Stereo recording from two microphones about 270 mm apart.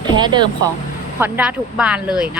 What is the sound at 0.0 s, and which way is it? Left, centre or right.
Speech, centre.